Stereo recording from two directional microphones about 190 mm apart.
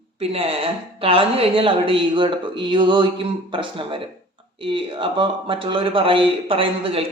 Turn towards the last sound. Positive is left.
turn(degrees=-30)  # may be behind; listen again after turning